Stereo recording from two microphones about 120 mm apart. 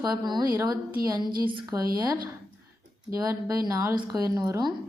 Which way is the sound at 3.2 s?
30° right (ahead or behind).